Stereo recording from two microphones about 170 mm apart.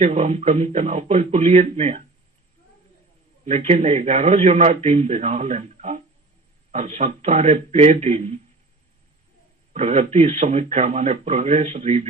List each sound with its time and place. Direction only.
0.0 s a man's voice: 40° right (ahead or behind)
3.4 s a man's voice: 40° right (ahead or behind)
9.7 s a man's voice: 40° right (ahead or behind)